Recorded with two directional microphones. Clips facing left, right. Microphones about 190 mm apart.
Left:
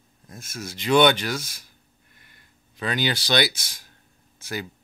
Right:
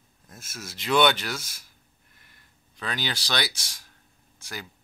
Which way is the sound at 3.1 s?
20° left (ahead or behind).